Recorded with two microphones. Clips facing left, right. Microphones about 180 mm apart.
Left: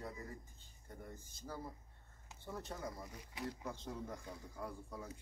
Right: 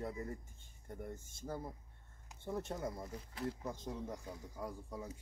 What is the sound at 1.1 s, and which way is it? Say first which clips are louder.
Speech: right 4 dB; 25° right (ahead or behind).